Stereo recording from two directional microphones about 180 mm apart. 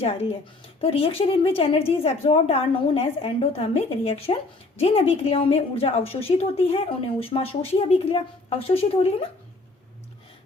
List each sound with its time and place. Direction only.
0.0 s a woman's voice: 35° left (ahead or behind)